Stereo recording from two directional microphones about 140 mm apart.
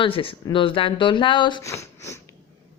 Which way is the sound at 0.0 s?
40° left (ahead or behind).